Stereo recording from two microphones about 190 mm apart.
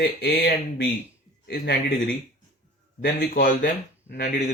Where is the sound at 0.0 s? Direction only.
60° left (ahead or behind).